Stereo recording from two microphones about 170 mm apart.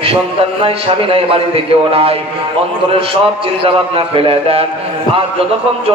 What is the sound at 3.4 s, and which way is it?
A man's voice, 35° right (ahead or behind).